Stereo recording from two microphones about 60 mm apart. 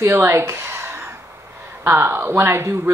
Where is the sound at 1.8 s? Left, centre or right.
Right.